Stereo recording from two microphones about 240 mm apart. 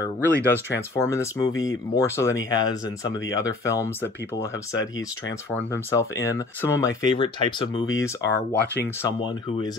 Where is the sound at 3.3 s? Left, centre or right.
Centre.